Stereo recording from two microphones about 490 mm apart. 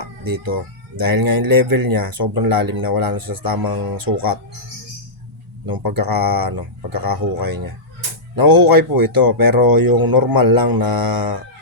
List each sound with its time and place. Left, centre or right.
0.0 s cat: right
0.9 s speech: right
5.6 s speech: right